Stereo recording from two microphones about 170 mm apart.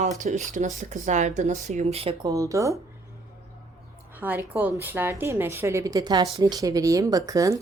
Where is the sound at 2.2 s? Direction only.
20° right (ahead or behind).